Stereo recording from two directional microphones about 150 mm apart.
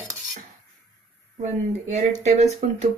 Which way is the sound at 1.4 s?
50° right (ahead or behind).